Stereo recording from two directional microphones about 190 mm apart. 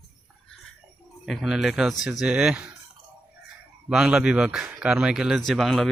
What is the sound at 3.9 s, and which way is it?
Speech, 5° right (ahead or behind).